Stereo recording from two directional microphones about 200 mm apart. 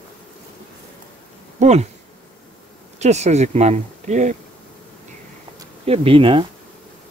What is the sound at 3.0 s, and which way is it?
Speech, 35° right (ahead or behind).